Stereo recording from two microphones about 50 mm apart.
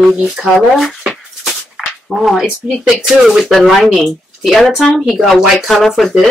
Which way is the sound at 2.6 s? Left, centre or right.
Centre.